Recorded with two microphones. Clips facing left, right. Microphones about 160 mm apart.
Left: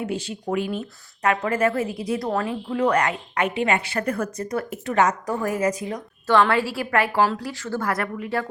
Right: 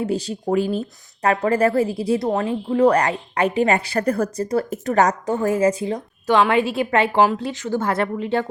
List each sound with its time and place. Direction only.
0.0 s a woman's voice: 35° right (ahead or behind)
5.2 s a woman's voice: 25° right (ahead or behind)
6.2 s a woman's voice: 15° right (ahead or behind)